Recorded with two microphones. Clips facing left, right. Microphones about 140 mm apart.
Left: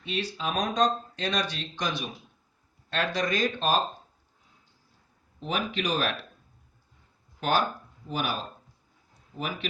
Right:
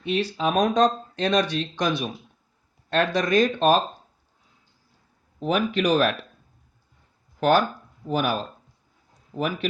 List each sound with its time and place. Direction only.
0.0 s speech: 55° right (ahead or behind)
5.4 s speech: 50° right (ahead or behind)
7.3 s speech: 50° right (ahead or behind)